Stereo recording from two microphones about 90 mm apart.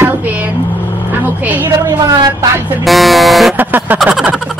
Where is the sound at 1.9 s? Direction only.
45° right (ahead or behind).